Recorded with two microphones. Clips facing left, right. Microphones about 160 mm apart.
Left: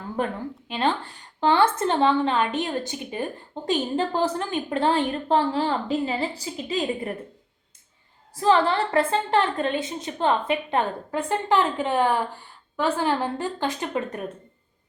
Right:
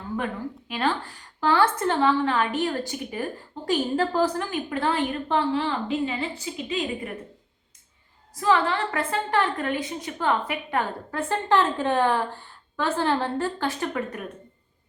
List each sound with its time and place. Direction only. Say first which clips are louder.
0.7 s a woman's voice: left 2 dB; 25° left (ahead or behind)
8.4 s a woman's voice: left 2 dB; 30° left (ahead or behind)